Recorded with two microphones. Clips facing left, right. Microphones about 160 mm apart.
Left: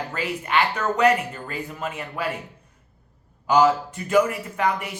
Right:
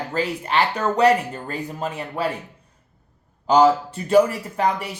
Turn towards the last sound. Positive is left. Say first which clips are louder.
# right 2 dB
turn(degrees=-35)  # may be behind; listen again after turning